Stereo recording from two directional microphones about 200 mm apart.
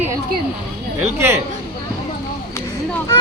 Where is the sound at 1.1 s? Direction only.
10° right (ahead or behind).